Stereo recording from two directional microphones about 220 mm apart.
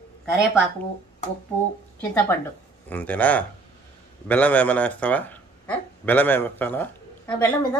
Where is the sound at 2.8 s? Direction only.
5° left (ahead or behind).